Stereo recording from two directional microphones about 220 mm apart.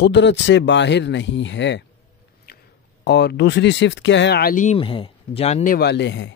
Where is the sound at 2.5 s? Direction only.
45° left (ahead or behind).